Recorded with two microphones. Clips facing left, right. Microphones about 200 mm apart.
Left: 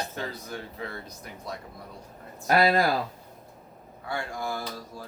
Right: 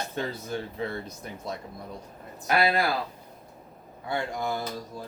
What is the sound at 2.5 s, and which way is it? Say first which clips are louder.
Speech: left 2 dB; 40° left (ahead or behind).